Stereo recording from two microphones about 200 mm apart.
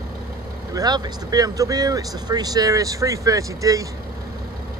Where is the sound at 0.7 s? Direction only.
20° right (ahead or behind).